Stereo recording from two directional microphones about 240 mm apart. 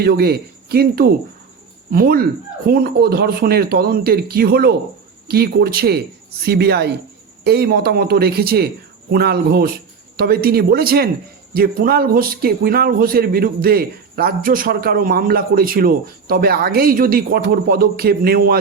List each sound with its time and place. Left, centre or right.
0.0 s speech: right